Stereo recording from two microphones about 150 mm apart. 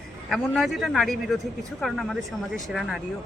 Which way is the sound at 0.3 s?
Centre (ahead or behind).